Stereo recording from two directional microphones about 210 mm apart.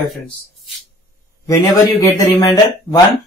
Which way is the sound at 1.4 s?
15° left (ahead or behind).